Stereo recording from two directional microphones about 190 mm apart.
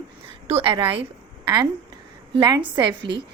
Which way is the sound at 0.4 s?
30° right (ahead or behind).